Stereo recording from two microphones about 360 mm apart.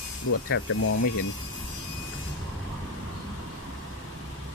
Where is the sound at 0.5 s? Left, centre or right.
Left.